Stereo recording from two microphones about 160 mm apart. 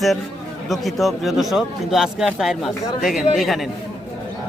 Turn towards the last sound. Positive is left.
turn(degrees=0)  # may be behind; listen again after turning